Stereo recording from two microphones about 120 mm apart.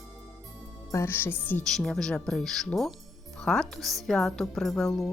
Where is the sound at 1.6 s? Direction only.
5° left (ahead or behind).